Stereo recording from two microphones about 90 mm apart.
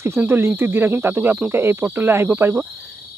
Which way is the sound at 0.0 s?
25° right (ahead or behind).